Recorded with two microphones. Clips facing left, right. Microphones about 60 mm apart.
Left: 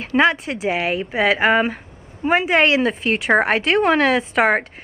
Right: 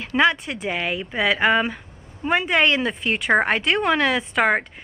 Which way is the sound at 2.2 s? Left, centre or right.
Centre.